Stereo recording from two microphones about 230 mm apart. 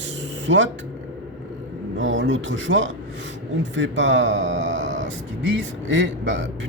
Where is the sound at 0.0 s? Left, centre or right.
Right.